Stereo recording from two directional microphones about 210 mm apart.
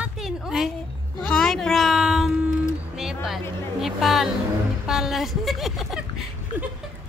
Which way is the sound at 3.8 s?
Centre (ahead or behind).